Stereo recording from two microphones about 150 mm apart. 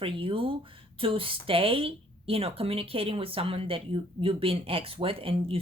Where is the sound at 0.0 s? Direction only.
35° right (ahead or behind).